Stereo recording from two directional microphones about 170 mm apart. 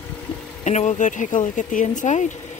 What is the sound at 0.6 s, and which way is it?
Speech, 45° left (ahead or behind).